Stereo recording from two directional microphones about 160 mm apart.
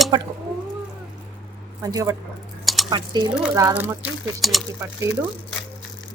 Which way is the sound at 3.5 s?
15° right (ahead or behind).